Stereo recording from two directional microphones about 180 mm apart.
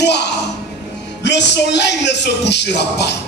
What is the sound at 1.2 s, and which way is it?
Music, 70° left (ahead or behind).